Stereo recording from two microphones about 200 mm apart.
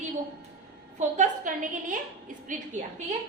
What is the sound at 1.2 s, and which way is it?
A woman's voice, 40° right (ahead or behind).